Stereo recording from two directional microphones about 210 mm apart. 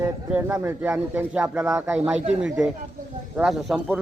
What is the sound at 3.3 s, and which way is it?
Speech, centre (ahead or behind).